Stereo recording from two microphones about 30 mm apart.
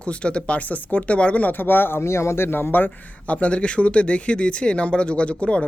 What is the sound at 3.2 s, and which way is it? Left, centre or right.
Speech, left.